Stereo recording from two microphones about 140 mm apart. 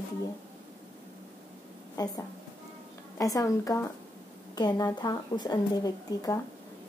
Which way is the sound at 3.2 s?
25° left (ahead or behind).